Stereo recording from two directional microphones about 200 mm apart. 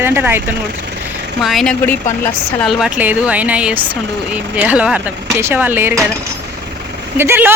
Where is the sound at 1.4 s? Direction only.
Centre (ahead or behind).